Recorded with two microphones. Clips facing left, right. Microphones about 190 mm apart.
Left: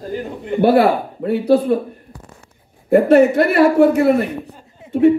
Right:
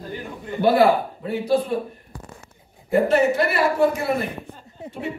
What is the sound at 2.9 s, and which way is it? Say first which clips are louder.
A woman's voice: left 7 dB; 55° left (ahead or behind).